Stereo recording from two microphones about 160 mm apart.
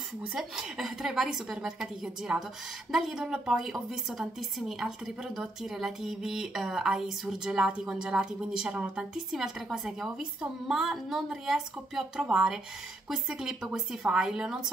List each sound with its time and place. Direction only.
0.3 s a woman's voice: 5° right (ahead or behind)